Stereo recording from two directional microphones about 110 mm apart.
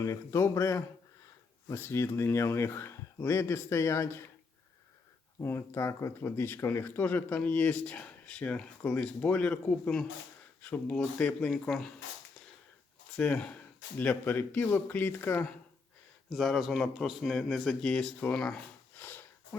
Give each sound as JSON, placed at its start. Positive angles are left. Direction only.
{"t": 0.0, "sound": "speech", "side_deg": 25}
{"t": 5.4, "sound": "speech", "side_deg": 25}
{"t": 13.1, "sound": "speech", "side_deg": 10}
{"t": 16.3, "sound": "speech", "side_deg": 0}
{"t": 18.9, "sound": "a sound", "side_deg": 15}